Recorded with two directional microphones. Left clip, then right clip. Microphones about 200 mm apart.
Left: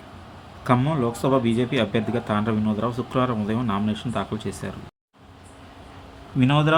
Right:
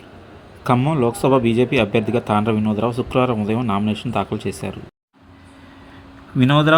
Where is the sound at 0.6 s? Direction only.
20° right (ahead or behind).